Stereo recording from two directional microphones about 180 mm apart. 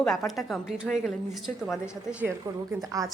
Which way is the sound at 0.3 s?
Centre (ahead or behind).